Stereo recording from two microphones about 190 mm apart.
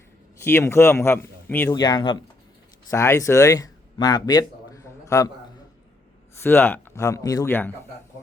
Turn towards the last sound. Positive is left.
turn(degrees=10)  # may be behind; listen again after turning